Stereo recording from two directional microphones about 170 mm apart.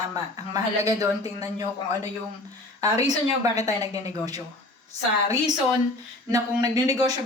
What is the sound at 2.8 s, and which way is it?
Speech, 20° right (ahead or behind).